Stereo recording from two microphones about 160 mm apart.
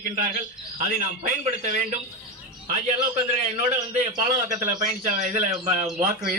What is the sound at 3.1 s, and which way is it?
A man's voice, 45° right (ahead or behind).